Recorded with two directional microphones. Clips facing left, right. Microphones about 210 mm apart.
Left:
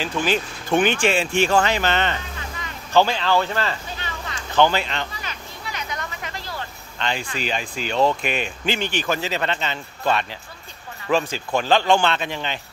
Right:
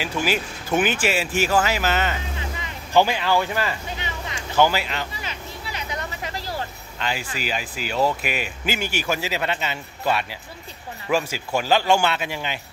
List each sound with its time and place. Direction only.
0.0 s speech: 10° right (ahead or behind)
2.3 s vehicle: 15° right (ahead or behind)
5.2 s vehicle: 25° right (ahead or behind)
7.0 s speech: 5° right (ahead or behind)